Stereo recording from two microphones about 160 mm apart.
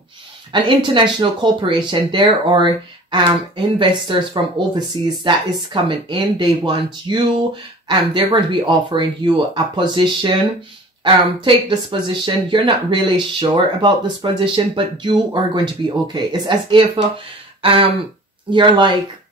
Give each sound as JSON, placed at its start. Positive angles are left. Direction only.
{"t": 0.5, "sound": "speech", "side_deg": -30}
{"t": 11.4, "sound": "speech", "side_deg": -30}
{"t": 17.6, "sound": "a sound", "side_deg": -35}
{"t": 18.5, "sound": "speech", "side_deg": -30}